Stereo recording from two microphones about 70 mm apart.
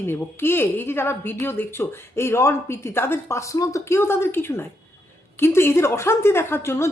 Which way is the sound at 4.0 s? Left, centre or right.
Left.